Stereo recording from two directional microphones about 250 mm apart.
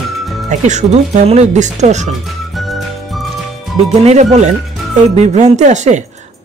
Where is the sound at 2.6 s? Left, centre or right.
Centre.